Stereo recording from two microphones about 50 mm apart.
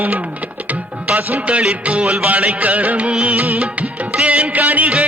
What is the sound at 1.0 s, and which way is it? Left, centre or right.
Music, right.